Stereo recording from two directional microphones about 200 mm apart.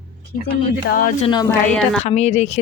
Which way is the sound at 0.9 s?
45° left (ahead or behind).